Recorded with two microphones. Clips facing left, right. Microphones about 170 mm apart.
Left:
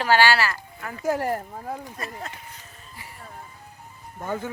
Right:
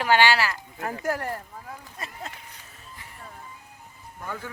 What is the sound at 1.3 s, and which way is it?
Speech, 45° left (ahead or behind).